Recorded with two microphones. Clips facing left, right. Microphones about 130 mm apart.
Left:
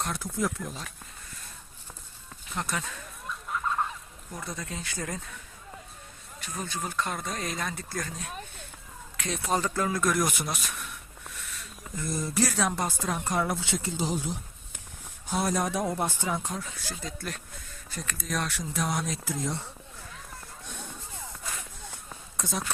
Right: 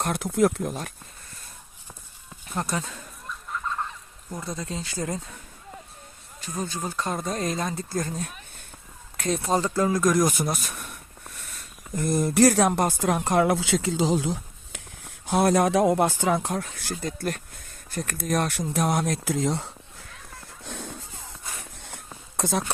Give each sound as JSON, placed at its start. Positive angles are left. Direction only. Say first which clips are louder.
{"t": 0.0, "sound": "speech", "louder": "right 8 dB", "side_deg": -65}
{"t": 2.5, "sound": "speech", "louder": "right 4 dB", "side_deg": -40}
{"t": 4.4, "sound": "speech", "louder": "right 5 dB", "side_deg": -30}
{"t": 6.5, "sound": "speech", "louder": "right 4 dB", "side_deg": -30}
{"t": 11.3, "sound": "a sound", "louder": "left 2 dB", "side_deg": -45}
{"t": 11.9, "sound": "speech", "louder": "right 8 dB", "side_deg": -65}
{"t": 14.7, "sound": "speech", "louder": "right 3 dB", "side_deg": -70}
{"t": 16.9, "sound": "speech", "louder": "right 9 dB", "side_deg": -50}
{"t": 20.7, "sound": "a sound", "louder": "right 7 dB", "side_deg": -90}
{"t": 21.8, "sound": "a sound", "louder": "right 1 dB", "side_deg": -70}